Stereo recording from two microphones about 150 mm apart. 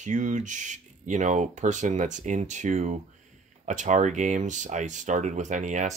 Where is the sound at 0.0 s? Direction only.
55° right (ahead or behind).